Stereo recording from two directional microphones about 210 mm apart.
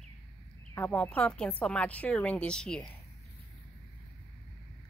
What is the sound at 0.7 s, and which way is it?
A woman's voice, 5° left (ahead or behind).